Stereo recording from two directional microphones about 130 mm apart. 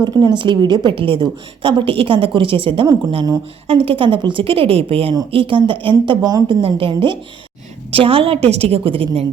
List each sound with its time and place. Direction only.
0.0 s a woman's voice: 35° right (ahead or behind)